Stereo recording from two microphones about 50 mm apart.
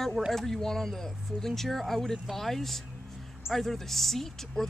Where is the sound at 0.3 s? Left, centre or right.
Centre.